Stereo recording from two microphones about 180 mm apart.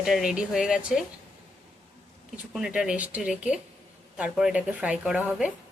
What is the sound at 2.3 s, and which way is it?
A woman's voice, 5° right (ahead or behind).